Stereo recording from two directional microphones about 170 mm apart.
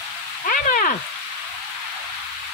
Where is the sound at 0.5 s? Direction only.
55° left (ahead or behind).